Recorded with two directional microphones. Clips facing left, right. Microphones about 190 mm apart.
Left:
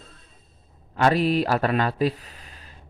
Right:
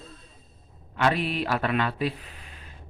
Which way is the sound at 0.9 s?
40° left (ahead or behind).